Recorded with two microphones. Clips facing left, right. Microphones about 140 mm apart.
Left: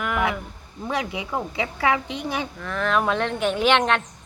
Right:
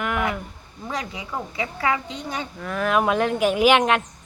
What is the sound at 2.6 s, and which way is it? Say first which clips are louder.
Speech: right 3 dB; 10° right (ahead or behind).